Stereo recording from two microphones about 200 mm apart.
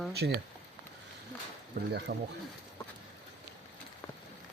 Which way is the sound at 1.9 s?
55° right (ahead or behind).